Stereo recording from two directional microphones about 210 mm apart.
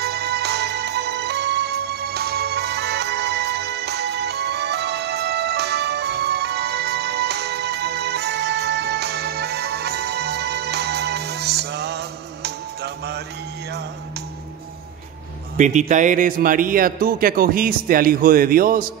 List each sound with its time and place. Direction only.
0.0 s music: 50° right (ahead or behind)
15.5 s a man's voice: 35° right (ahead or behind)